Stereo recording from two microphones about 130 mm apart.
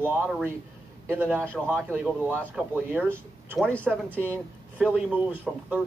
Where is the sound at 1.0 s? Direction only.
15° right (ahead or behind).